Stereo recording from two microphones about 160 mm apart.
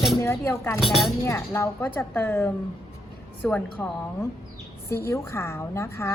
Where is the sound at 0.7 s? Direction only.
Centre (ahead or behind).